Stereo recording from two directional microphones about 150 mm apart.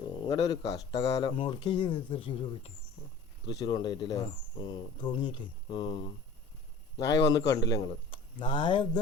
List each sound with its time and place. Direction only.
0.3 s a man's voice: 25° left (ahead or behind)
1.3 s a man's voice: 35° left (ahead or behind)
7.8 s speech: 40° left (ahead or behind)